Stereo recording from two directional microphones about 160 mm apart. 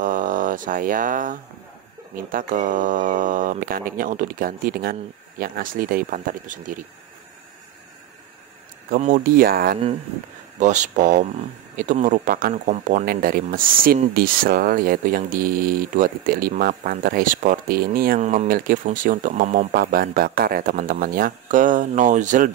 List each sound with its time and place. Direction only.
0.0 s speech: 55° right (ahead or behind)
8.9 s speech: 55° right (ahead or behind)
10.6 s speech: 50° right (ahead or behind)
18.2 s speech: 50° right (ahead or behind)